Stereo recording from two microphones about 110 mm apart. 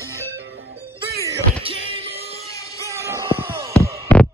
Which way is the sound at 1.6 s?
55° right (ahead or behind).